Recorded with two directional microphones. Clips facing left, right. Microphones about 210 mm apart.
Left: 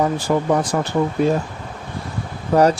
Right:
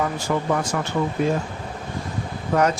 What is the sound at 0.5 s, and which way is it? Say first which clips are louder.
Speech: left 5 dB; 35° left (ahead or behind).